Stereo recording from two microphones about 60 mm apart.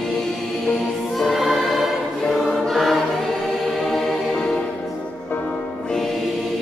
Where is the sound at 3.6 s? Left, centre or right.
Centre.